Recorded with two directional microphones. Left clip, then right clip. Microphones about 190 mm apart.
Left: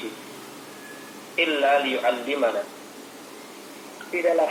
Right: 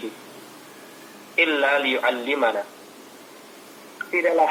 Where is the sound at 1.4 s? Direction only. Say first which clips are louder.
Right 1 dB; 25° right (ahead or behind).